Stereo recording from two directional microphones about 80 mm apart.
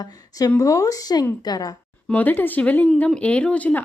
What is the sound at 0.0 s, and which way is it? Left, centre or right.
A woman's voice, left.